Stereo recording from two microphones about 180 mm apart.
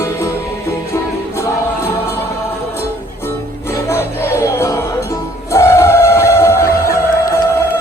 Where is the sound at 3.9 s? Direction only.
15° left (ahead or behind).